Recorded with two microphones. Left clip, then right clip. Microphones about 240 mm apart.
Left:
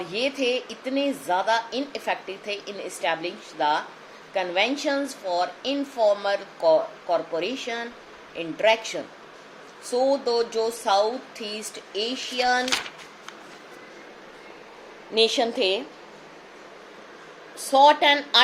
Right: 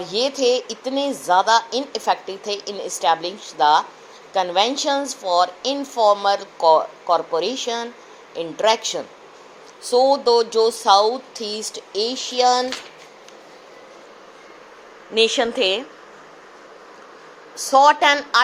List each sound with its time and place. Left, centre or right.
0.1 s a woman's voice: right
15.1 s a woman's voice: centre
17.7 s a woman's voice: centre